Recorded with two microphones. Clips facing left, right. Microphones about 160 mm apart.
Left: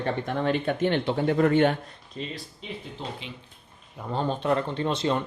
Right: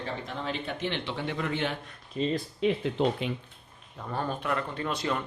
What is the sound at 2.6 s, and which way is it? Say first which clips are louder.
Speech: right 13 dB; 70° right (ahead or behind).